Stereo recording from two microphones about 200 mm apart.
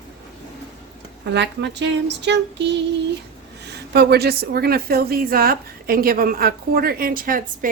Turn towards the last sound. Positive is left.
turn(degrees=-45)  # may be behind; listen again after turning